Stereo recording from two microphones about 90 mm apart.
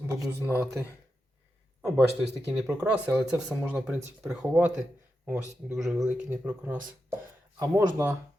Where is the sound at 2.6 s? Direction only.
35° right (ahead or behind).